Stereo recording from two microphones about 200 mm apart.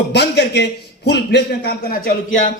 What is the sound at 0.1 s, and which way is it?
A man's voice, 55° left (ahead or behind).